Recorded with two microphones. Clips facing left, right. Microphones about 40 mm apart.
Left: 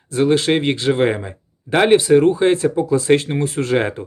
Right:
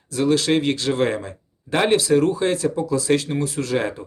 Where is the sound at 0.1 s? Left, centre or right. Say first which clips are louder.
Left 3 dB; left.